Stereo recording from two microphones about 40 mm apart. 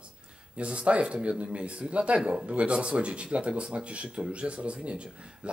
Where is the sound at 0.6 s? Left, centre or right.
Right.